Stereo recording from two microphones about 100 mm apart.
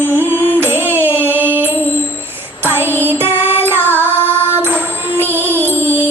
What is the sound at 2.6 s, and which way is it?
Child singing, 20° right (ahead or behind).